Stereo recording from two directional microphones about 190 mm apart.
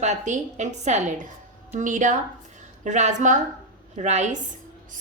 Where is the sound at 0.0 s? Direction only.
35° right (ahead or behind).